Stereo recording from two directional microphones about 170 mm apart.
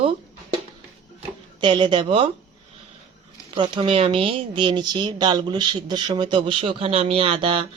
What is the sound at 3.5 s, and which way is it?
Speech, 30° right (ahead or behind).